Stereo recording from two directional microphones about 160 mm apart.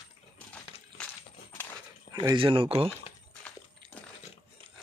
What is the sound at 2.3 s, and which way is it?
Speech, 30° right (ahead or behind).